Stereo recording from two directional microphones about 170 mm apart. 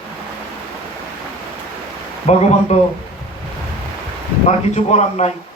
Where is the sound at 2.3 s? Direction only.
40° left (ahead or behind).